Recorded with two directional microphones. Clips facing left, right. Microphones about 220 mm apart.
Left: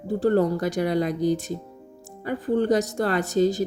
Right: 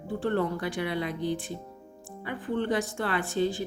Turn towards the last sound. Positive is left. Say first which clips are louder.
# left 7 dB
turn(degrees=40)  # may be behind; listen again after turning